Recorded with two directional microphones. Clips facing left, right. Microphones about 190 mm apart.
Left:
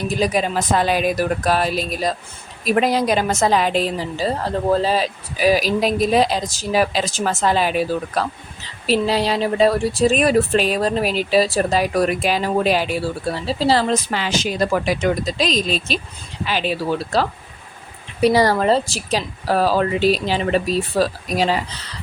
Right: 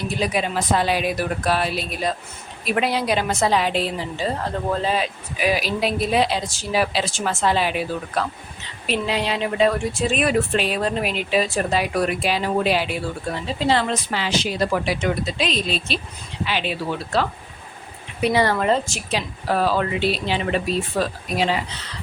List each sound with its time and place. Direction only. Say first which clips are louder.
0.1 s a woman's voice: left 4 dB; 40° left (ahead or behind)